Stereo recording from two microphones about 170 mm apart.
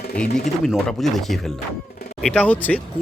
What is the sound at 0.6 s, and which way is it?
Speech, centre (ahead or behind).